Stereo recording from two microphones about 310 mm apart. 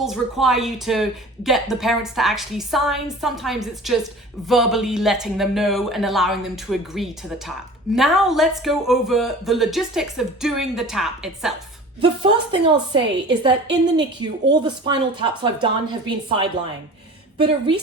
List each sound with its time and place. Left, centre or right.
0.0 s speech: centre
11.9 s a woman's voice: centre